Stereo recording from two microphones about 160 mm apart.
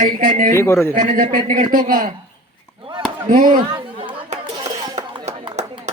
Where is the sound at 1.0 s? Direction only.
60° right (ahead or behind).